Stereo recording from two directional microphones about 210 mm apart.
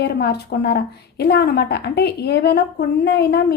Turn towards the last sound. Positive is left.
turn(degrees=50)  # may be behind; listen again after turning